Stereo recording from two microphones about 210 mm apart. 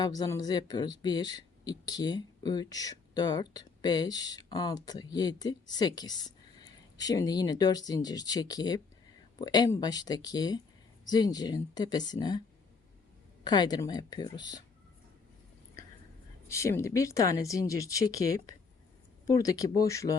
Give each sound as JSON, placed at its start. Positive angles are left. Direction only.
{"t": 0.0, "sound": "speech", "side_deg": 20}
{"t": 13.4, "sound": "speech", "side_deg": 20}
{"t": 16.5, "sound": "speech", "side_deg": 15}